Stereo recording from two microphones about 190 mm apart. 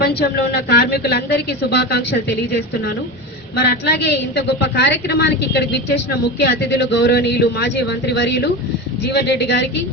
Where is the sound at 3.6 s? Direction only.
60° left (ahead or behind).